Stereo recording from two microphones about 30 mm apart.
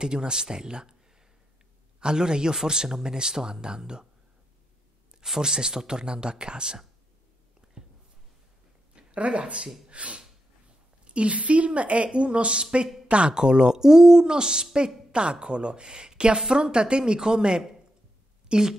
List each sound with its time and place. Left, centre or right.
0.0 s speech: right
2.0 s a man's voice: right
5.4 s speech: right
7.6 s a sound: right
8.9 s a woman's voice: right
16.3 s a woman's voice: centre